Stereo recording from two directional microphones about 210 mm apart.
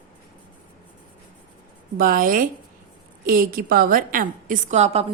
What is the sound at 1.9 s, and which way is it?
A woman's voice, 40° right (ahead or behind).